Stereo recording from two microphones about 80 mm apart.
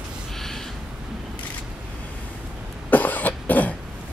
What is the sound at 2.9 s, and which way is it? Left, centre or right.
Cough, left.